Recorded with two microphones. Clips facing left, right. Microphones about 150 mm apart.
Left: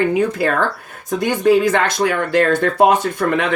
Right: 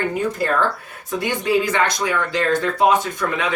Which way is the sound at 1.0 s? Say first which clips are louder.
Left 7 dB; 50° left (ahead or behind).